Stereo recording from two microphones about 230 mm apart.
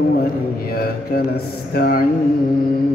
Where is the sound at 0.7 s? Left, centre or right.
Left.